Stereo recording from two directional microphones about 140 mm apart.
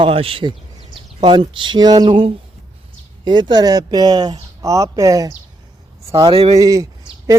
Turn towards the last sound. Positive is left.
turn(degrees=-25)  # may be behind; listen again after turning